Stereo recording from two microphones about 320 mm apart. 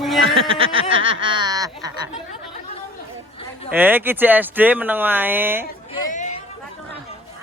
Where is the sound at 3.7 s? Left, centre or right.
Centre.